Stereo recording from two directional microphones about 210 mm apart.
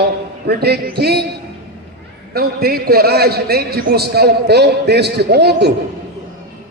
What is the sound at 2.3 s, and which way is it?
A man's voice, 45° right (ahead or behind).